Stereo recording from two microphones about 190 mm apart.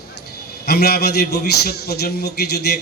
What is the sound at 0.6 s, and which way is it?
A man's voice, 55° left (ahead or behind).